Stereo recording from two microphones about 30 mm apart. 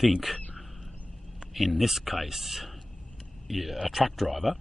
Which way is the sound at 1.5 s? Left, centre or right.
Centre.